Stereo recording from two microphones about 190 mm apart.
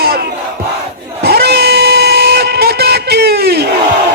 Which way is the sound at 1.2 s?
55° right (ahead or behind).